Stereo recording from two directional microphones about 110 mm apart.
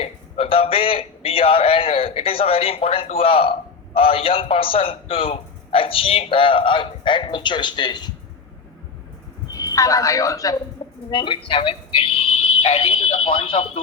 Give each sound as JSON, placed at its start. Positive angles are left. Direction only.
{"t": 0.0, "sound": "a man's voice", "side_deg": 60}
{"t": 9.5, "sound": "speech", "side_deg": 30}
{"t": 11.1, "sound": "a man's voice", "side_deg": 50}